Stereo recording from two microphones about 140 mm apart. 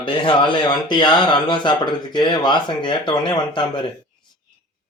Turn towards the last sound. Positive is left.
turn(degrees=35)  # may be behind; listen again after turning